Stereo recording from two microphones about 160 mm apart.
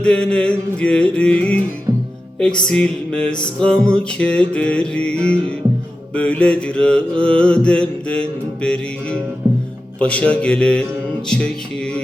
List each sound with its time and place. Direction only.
0.0 s mantra: 5° left (ahead or behind)
1.9 s music: 20° right (ahead or behind)
2.6 s music: 5° left (ahead or behind)
3.6 s mantra: 5° left (ahead or behind)
11.3 s speech: 5° left (ahead or behind)